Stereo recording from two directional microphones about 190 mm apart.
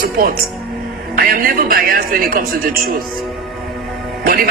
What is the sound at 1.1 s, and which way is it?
A woman's voice, 50° right (ahead or behind).